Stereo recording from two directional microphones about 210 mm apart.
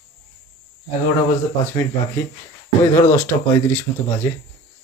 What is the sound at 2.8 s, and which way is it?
Speech, 15° left (ahead or behind).